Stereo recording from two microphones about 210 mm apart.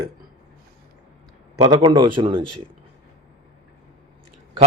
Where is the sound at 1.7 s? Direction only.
20° right (ahead or behind).